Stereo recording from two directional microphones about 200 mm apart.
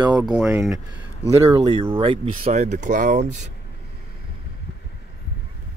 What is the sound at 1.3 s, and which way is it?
Speech, 20° right (ahead or behind).